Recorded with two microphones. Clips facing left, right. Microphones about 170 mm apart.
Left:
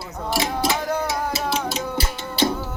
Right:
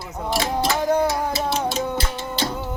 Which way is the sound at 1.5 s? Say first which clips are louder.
Right 2 dB; centre (ahead or behind).